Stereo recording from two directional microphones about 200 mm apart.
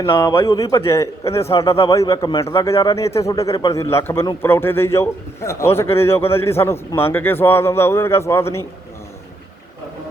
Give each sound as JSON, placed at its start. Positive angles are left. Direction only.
{"t": 0.0, "sound": "a man's voice", "side_deg": 20}